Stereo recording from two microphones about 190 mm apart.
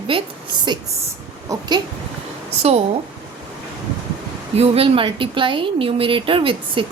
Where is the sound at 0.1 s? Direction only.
30° right (ahead or behind).